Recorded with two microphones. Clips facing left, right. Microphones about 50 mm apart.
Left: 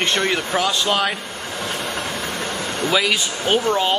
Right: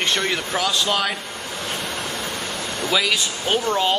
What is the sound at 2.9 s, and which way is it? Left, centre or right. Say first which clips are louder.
Speech: left 1 dB; centre.